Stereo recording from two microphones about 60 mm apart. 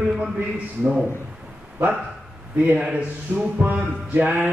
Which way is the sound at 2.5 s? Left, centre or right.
Right.